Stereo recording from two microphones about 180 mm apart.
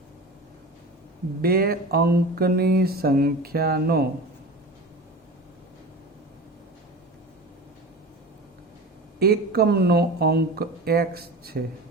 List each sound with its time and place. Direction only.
1.4 s speech: 55° right (ahead or behind)
9.1 s speech: 60° right (ahead or behind)